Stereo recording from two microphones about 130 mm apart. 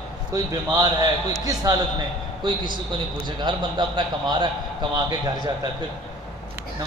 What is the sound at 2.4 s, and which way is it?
A man's voice, 35° right (ahead or behind).